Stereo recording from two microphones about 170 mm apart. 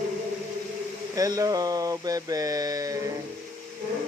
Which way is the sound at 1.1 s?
20° right (ahead or behind).